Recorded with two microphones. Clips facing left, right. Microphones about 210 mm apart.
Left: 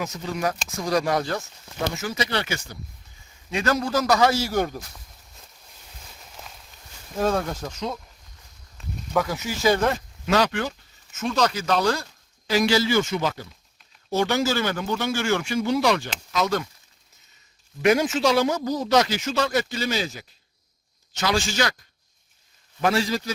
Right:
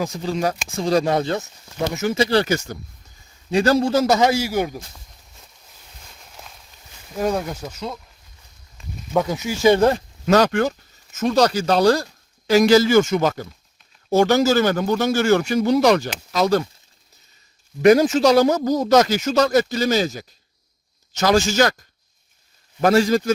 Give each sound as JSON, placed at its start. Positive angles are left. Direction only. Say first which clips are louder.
{"t": 0.0, "sound": "speech", "louder": "right 5 dB", "side_deg": -30}
{"t": 6.0, "sound": "walk", "louder": "even", "side_deg": 0}
{"t": 7.2, "sound": "speech", "louder": "right 1 dB", "side_deg": -10}
{"t": 8.8, "sound": "a sound", "louder": "left 1 dB", "side_deg": 0}
{"t": 9.1, "sound": "speech", "louder": "right 4 dB", "side_deg": -20}
{"t": 9.7, "sound": "a man's voice", "louder": "right 6 dB", "side_deg": -30}
{"t": 17.8, "sound": "a man's voice", "louder": "right 6 dB", "side_deg": -35}
{"t": 22.8, "sound": "a man's voice", "louder": "right 7 dB", "side_deg": -45}